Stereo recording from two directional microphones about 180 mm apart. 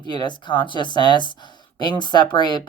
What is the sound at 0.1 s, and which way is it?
Speech, 25° left (ahead or behind).